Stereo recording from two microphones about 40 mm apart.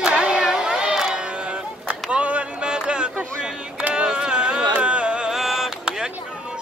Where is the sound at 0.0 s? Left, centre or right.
Right.